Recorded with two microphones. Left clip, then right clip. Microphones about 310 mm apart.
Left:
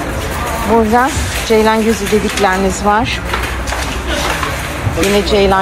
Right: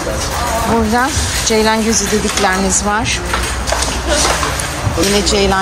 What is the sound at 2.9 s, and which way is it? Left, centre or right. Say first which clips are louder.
Speech: left 5 dB; centre.